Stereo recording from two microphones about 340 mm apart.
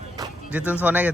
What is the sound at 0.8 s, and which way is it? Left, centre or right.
Speech, centre.